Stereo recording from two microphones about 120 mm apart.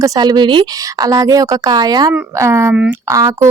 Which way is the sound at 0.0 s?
30° right (ahead or behind).